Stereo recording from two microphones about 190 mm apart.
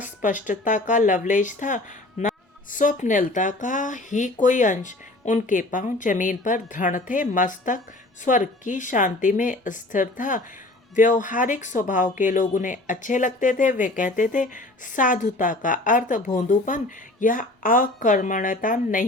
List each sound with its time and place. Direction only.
0.2 s speech: 40° left (ahead or behind)